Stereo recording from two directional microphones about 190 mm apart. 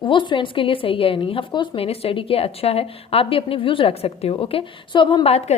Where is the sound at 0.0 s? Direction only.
25° left (ahead or behind).